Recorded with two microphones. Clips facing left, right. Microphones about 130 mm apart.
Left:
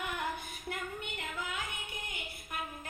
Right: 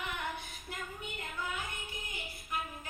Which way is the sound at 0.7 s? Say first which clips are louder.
Left 3 dB; 80° left.